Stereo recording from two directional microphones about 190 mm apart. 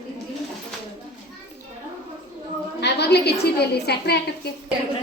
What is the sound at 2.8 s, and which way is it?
A woman's voice, 60° left (ahead or behind).